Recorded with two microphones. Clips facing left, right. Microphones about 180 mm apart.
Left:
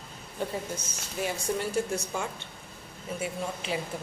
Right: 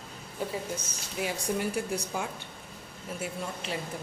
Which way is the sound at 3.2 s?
Centre (ahead or behind).